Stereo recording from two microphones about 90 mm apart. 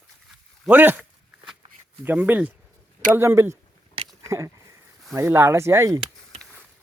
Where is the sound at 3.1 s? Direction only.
30° right (ahead or behind).